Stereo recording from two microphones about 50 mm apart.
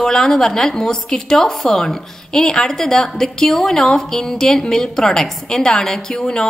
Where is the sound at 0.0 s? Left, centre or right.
Centre.